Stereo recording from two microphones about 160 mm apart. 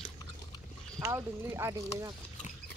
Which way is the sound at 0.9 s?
20° right (ahead or behind).